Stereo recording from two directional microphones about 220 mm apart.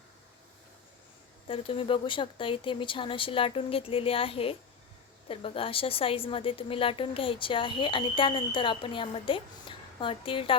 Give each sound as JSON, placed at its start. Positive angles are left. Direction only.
{"t": 1.5, "sound": "a woman's voice", "side_deg": 25}